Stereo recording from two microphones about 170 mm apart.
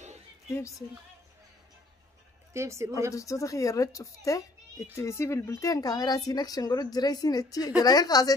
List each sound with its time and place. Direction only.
0.5 s a woman's voice: 15° left (ahead or behind)
2.5 s a woman's voice: 15° right (ahead or behind)
3.2 s speech: 20° left (ahead or behind)